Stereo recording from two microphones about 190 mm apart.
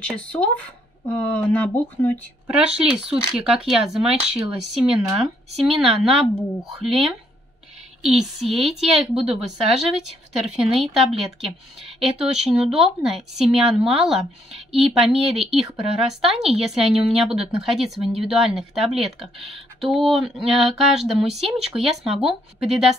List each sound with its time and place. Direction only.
0.0 s speech: 5° left (ahead or behind)
2.4 s speech: 5° right (ahead or behind)
8.0 s speech: centre (ahead or behind)
15.1 s speech: 30° right (ahead or behind)
15.9 s speech: centre (ahead or behind)